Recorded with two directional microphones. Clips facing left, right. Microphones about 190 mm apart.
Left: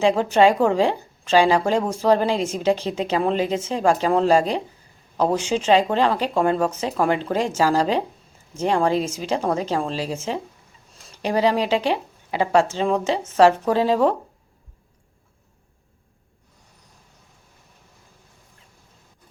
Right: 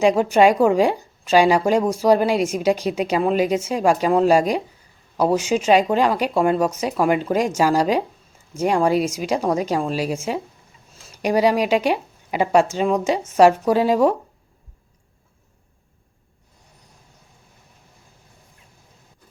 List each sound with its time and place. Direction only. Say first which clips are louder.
0.0 s a woman's voice: right 2 dB; 15° right (ahead or behind)